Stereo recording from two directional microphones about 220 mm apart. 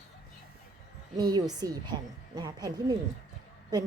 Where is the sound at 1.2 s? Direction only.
20° right (ahead or behind).